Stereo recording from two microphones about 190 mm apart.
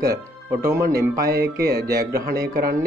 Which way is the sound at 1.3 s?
55° right (ahead or behind).